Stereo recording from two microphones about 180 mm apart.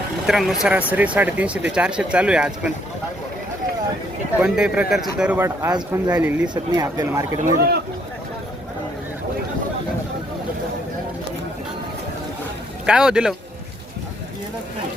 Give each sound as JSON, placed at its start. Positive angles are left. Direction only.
{"t": 0.3, "sound": "speech", "side_deg": 0}
{"t": 4.4, "sound": "speech", "side_deg": -5}
{"t": 12.8, "sound": "a man's voice", "side_deg": -5}